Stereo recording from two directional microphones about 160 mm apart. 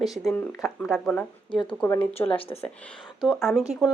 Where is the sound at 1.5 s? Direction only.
30° left (ahead or behind).